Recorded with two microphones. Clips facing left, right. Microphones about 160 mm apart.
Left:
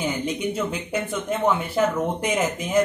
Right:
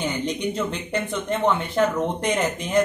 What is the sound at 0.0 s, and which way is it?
Speech, 10° left (ahead or behind).